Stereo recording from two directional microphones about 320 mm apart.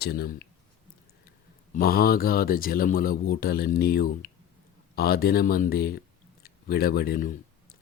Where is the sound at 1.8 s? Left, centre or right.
Left.